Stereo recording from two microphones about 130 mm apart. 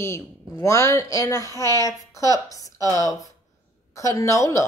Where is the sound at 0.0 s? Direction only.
20° left (ahead or behind).